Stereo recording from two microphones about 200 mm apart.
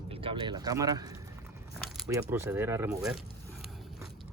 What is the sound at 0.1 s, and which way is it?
Speech, 25° right (ahead or behind).